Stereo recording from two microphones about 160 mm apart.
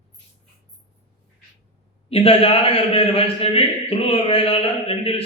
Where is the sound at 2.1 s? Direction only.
35° left (ahead or behind).